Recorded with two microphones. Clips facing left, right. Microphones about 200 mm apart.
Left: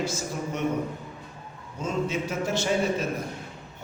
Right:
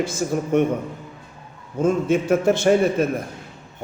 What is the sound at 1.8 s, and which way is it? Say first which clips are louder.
A man's voice: right 9 dB; 50° right (ahead or behind).